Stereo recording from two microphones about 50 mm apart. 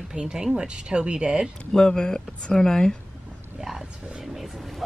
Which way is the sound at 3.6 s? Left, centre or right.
Centre.